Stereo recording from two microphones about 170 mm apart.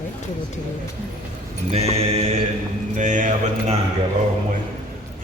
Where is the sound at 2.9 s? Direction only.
45° right (ahead or behind).